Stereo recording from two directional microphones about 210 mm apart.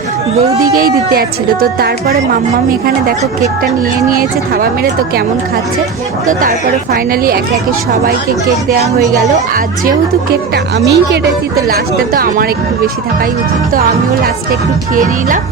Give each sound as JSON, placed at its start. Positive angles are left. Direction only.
{"t": 0.7, "sound": "speech", "side_deg": -45}
{"t": 4.1, "sound": "speech", "side_deg": -45}
{"t": 10.8, "sound": "speech", "side_deg": -55}